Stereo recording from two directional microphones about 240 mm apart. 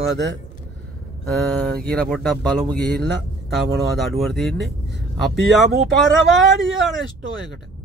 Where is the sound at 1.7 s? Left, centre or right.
Centre.